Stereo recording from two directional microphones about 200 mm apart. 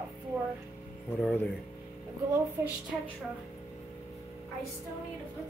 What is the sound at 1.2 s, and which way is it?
Speech, 5° left (ahead or behind).